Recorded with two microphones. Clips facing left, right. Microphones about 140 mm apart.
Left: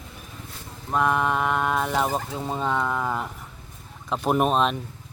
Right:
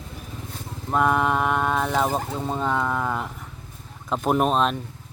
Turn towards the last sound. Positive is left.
turn(degrees=0)  # may be behind; listen again after turning